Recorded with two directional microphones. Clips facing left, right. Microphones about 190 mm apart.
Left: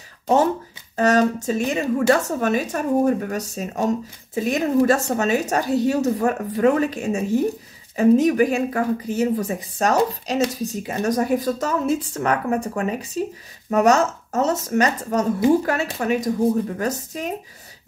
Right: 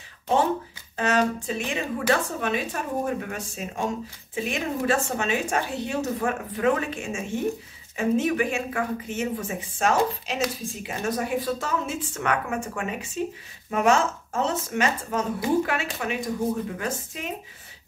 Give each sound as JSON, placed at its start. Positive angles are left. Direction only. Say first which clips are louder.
{"t": 0.9, "sound": "speech", "louder": "left 6 dB", "side_deg": 40}